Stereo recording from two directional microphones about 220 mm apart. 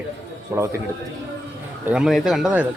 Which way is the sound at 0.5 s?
10° right (ahead or behind).